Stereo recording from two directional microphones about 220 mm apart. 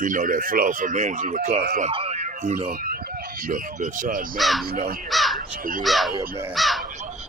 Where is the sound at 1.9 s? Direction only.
25° right (ahead or behind).